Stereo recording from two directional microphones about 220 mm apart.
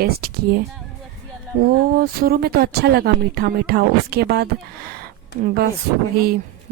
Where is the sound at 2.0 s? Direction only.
40° right (ahead or behind).